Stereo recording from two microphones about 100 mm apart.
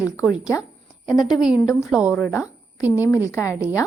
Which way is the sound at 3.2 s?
30° left (ahead or behind).